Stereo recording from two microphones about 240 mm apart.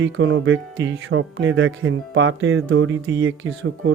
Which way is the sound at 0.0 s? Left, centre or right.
Right.